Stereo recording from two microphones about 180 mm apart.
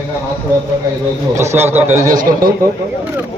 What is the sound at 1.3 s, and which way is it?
Speech, 15° right (ahead or behind).